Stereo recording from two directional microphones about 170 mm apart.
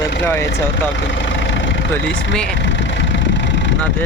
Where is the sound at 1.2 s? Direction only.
90° left.